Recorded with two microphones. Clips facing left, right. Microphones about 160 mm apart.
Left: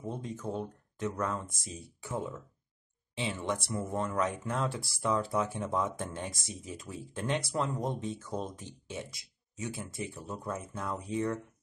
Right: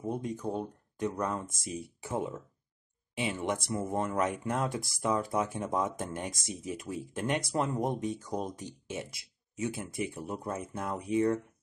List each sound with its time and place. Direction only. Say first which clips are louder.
0.0 s speech: right 4 dB; 15° right (ahead or behind)